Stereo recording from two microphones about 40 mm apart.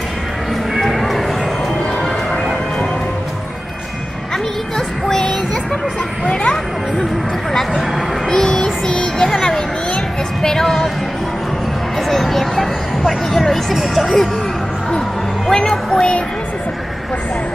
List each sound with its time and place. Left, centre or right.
0.8 s music: centre
4.7 s music: centre
8.3 s child singing: centre
10.4 s music: centre
12.1 s a sound: centre
13.3 s vehicle: centre
13.7 s music: centre
15.5 s music: centre